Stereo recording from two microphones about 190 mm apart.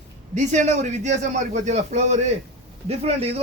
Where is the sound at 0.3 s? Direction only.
40° right (ahead or behind).